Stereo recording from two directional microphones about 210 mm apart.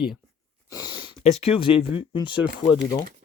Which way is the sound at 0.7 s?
20° left (ahead or behind).